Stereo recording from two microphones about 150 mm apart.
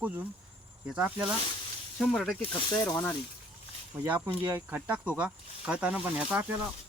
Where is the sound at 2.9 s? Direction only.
10° left (ahead or behind).